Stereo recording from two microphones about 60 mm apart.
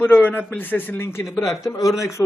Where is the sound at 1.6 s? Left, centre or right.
Left.